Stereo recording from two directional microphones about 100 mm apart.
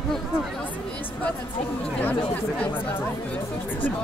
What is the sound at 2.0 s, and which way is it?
Speech, 15° left (ahead or behind).